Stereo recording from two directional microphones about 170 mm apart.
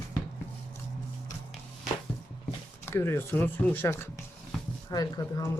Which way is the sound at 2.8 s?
15° left (ahead or behind).